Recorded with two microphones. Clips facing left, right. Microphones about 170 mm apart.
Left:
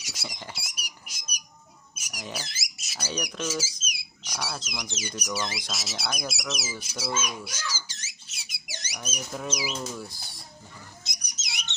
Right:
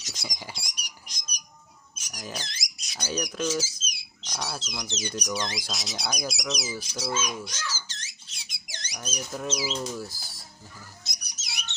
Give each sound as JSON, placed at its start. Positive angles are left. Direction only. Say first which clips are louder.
{"t": 0.0, "sound": "rodents", "louder": "even", "side_deg": 10}
{"t": 0.5, "sound": "squawk", "louder": "even", "side_deg": 5}
{"t": 2.0, "sound": "a sound", "louder": "left 1 dB", "side_deg": 10}
{"t": 2.3, "sound": "squeak", "louder": "even", "side_deg": 5}
{"t": 3.4, "sound": "speech", "louder": "right 4 dB", "side_deg": 10}
{"t": 3.8, "sound": "a sound", "louder": "left 1 dB", "side_deg": 10}
{"t": 4.6, "sound": "speech", "louder": "right 2 dB", "side_deg": 10}
{"t": 7.2, "sound": "squawk", "louder": "right 1 dB", "side_deg": 10}
{"t": 8.7, "sound": "speech", "louder": "right 1 dB", "side_deg": 10}
{"t": 9.5, "sound": "speech", "louder": "right 2 dB", "side_deg": 15}
{"t": 10.1, "sound": "speech", "louder": "left 1 dB", "side_deg": 0}
{"t": 11.0, "sound": "a sound", "louder": "left 1 dB", "side_deg": 20}